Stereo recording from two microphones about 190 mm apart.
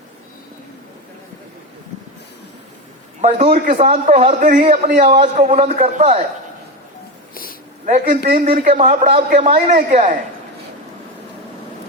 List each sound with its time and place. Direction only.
3.2 s a man's voice: 35° right (ahead or behind)
4.7 s a man's voice: 30° right (ahead or behind)
7.9 s a man's voice: 40° right (ahead or behind)